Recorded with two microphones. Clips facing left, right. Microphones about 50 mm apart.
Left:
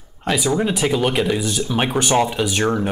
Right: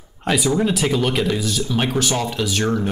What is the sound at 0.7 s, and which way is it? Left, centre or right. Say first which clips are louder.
Speech: left 1 dB; centre.